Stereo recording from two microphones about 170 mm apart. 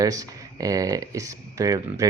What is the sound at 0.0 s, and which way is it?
Speech, 20° right (ahead or behind).